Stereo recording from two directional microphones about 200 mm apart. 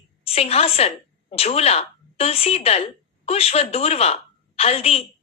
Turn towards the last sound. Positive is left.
turn(degrees=30)  # may be behind; listen again after turning